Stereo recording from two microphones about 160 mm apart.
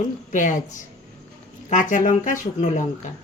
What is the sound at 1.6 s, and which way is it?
Speech, 50° left (ahead or behind).